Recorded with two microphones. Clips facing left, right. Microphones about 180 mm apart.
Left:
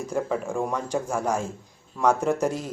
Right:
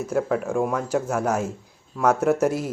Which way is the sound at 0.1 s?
5° right (ahead or behind).